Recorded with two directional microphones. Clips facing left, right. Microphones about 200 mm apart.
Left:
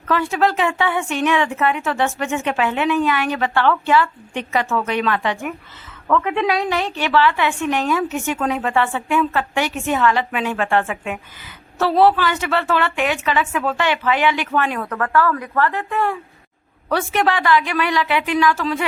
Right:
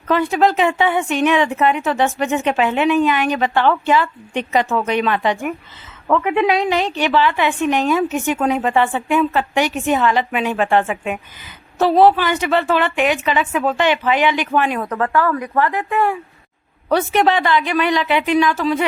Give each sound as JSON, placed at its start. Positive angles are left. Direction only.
{"t": 0.1, "sound": "a woman's voice", "side_deg": -20}